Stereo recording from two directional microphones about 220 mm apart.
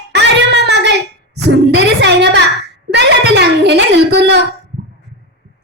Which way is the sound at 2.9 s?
50° right (ahead or behind).